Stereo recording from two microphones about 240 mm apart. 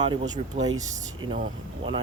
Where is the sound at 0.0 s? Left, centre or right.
Right.